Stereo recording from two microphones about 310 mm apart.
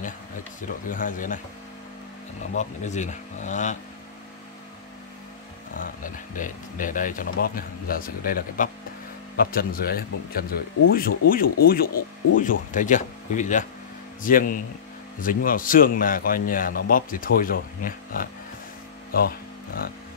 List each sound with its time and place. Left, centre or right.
0.8 s a man's voice: left
2.5 s a man's voice: left
5.8 s a man's voice: left